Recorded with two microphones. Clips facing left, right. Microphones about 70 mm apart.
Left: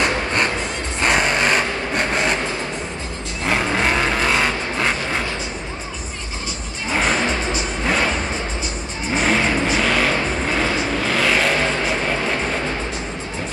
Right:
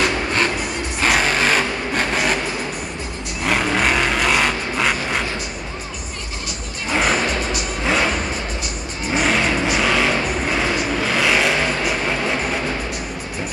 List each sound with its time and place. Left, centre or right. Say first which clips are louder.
1.0 s sewing machine: even; centre
2.0 s vehicle: even; centre
3.4 s vehicle: right 1 dB; centre
6.9 s music: right 1 dB; centre
9.1 s vehicle: even; centre